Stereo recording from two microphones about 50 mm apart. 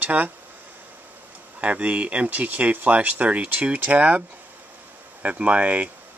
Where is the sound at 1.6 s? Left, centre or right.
Right.